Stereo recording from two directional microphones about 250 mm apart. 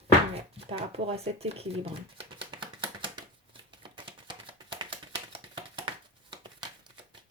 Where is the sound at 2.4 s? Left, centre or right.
Centre.